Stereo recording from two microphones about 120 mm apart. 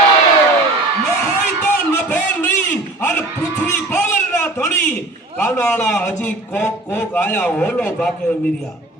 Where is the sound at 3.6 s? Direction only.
15° left (ahead or behind).